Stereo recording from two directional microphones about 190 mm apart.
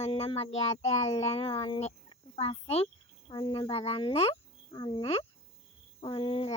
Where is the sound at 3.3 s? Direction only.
25° left (ahead or behind).